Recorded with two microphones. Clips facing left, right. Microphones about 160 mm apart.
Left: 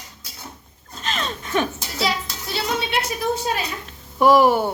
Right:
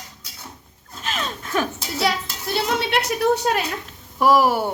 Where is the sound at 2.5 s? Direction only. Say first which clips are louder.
Right 2 dB; 75° right (ahead or behind).